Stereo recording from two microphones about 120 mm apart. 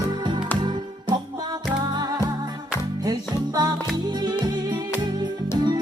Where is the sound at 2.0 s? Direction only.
35° right (ahead or behind).